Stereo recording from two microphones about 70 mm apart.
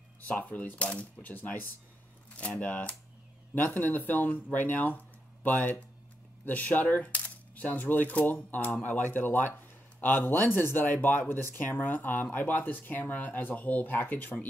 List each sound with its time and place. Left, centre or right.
0.2 s speech: left